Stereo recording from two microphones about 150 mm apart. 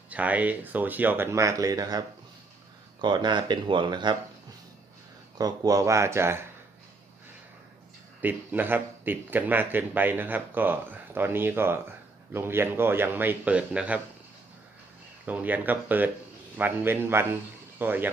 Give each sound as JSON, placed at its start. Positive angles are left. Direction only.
{"t": 0.1, "sound": "speech", "side_deg": -10}
{"t": 5.4, "sound": "speech", "side_deg": -25}
{"t": 8.2, "sound": "speech", "side_deg": -10}
{"t": 15.2, "sound": "speech", "side_deg": -10}